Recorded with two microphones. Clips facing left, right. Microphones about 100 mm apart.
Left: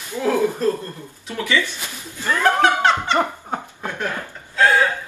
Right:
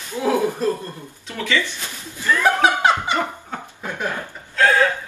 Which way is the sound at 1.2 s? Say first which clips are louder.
Left 1 dB; 15° left (ahead or behind).